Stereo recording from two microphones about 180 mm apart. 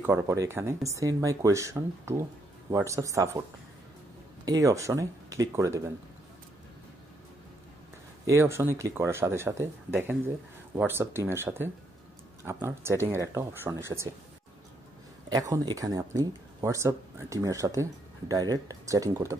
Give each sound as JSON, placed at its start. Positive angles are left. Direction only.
{"t": 0.0, "sound": "speech", "side_deg": -15}
{"t": 4.5, "sound": "speech", "side_deg": -20}
{"t": 8.3, "sound": "speech", "side_deg": -15}
{"t": 15.2, "sound": "speech", "side_deg": -20}